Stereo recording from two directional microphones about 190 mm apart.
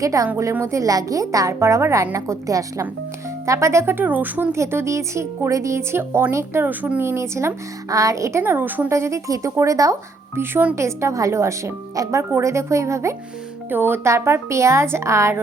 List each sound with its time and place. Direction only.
0.0 s speech: 15° right (ahead or behind)